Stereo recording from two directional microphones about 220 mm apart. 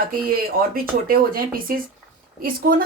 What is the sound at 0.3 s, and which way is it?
Speech, 40° right (ahead or behind).